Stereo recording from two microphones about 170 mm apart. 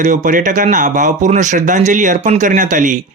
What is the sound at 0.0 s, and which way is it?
Speech, 50° right (ahead or behind).